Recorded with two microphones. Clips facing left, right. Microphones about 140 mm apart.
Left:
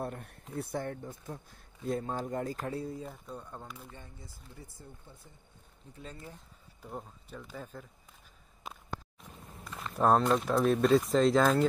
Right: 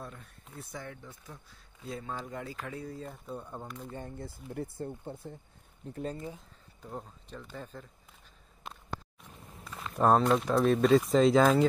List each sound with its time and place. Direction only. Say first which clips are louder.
0.0 s speech: left 7 dB; 60° left (ahead or behind); by 2.9 s 35° left (ahead or behind)
3.0 s speech: right 1 dB; centre (ahead or behind)
3.3 s speech: right 3 dB; 10° right (ahead or behind)
3.6 s speech: right 4 dB; centre (ahead or behind)
4.0 s speech: right 10 dB; 55° right (ahead or behind)
5.8 s speech: right 12 dB; 70° right (ahead or behind)
6.8 s speech: right 1 dB; 5° left (ahead or behind)
9.7 s speech: right 1 dB; centre (ahead or behind)